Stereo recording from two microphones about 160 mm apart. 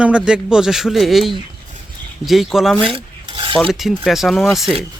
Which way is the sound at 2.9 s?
30° right (ahead or behind).